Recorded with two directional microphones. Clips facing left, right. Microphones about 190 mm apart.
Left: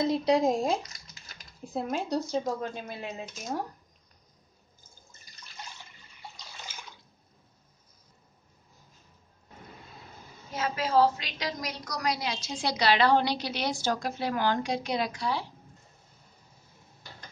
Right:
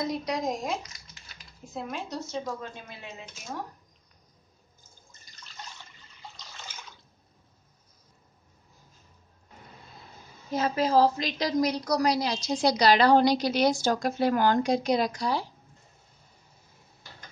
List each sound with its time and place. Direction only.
0.0 s speech: 25° left (ahead or behind)
10.5 s a woman's voice: 35° right (ahead or behind)